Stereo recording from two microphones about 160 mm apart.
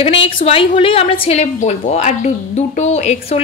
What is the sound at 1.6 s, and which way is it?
Speech, 50° left (ahead or behind).